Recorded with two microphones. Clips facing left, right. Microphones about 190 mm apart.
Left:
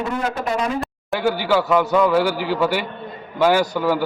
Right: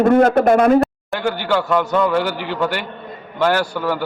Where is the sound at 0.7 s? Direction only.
5° left (ahead or behind).